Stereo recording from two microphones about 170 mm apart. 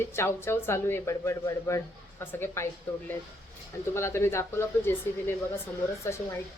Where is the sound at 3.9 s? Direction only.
15° left (ahead or behind).